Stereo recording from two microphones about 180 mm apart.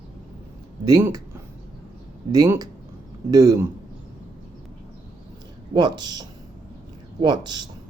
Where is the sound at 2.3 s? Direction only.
20° right (ahead or behind).